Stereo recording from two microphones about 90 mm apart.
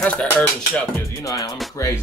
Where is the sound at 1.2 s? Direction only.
40° left (ahead or behind).